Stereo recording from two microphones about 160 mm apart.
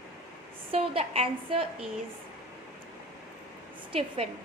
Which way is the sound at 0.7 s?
40° right (ahead or behind).